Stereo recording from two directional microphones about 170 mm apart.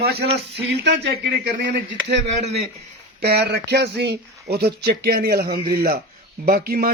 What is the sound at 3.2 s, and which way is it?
A man's voice, 70° right (ahead or behind).